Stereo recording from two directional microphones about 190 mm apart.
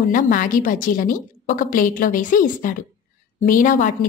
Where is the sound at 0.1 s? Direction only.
45° left (ahead or behind).